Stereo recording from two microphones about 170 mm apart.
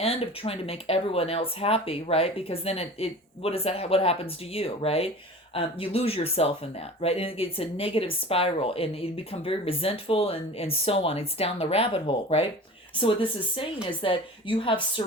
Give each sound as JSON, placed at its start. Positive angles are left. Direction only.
{"t": 0.0, "sound": "speech", "side_deg": 35}